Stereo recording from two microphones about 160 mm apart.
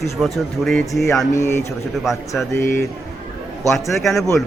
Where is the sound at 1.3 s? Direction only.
15° left (ahead or behind).